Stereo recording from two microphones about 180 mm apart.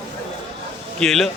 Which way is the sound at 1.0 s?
Centre (ahead or behind).